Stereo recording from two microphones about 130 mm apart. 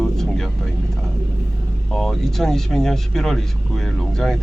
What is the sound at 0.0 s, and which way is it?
Vehicle, 5° left (ahead or behind).